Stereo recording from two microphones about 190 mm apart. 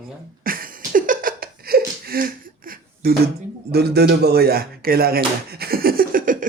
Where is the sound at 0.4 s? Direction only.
50° right (ahead or behind).